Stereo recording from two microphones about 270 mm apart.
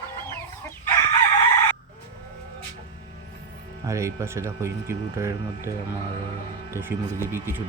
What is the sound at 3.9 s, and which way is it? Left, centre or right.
Speech, centre.